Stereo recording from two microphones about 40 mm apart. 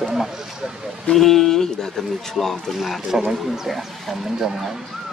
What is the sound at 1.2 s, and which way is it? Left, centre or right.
Speech, centre.